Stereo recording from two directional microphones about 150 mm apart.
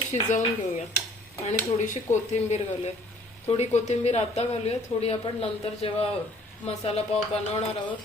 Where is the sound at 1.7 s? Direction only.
50° left (ahead or behind).